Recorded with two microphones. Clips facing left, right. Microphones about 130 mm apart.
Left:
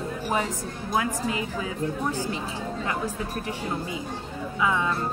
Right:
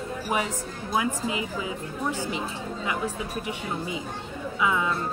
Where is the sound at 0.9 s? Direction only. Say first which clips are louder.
Even; 20° right (ahead or behind).